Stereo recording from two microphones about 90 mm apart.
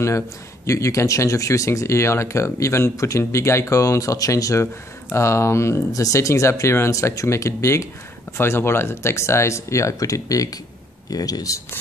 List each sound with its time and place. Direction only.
0.7 s speech: 35° left (ahead or behind)